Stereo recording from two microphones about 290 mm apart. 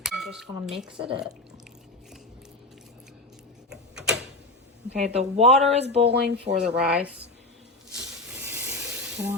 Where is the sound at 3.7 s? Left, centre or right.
Centre.